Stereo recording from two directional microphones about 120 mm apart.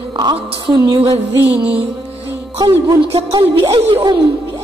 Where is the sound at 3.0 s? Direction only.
55° right (ahead or behind).